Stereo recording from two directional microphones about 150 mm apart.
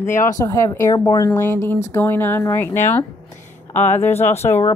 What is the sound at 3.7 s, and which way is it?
Speech, 50° left (ahead or behind).